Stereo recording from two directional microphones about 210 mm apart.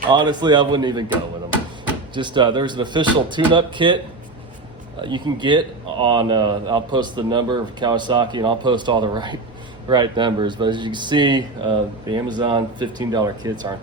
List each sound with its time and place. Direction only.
0.1 s a man's voice: 20° right (ahead or behind)
2.1 s a man's voice: 20° right (ahead or behind)
4.9 s a man's voice: 20° right (ahead or behind)